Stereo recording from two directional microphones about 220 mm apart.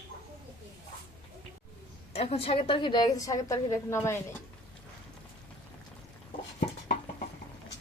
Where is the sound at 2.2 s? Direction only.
30° left (ahead or behind); by 4.2 s 10° left (ahead or behind).